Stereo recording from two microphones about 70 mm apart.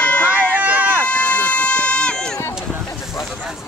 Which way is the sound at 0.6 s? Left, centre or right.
Right.